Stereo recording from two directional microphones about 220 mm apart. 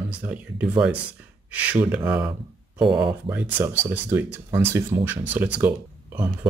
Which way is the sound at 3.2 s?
10° right (ahead or behind).